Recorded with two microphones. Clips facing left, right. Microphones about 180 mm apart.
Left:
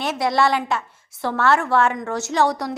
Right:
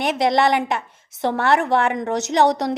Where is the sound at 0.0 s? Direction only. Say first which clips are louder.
Right 2 dB; 20° right (ahead or behind).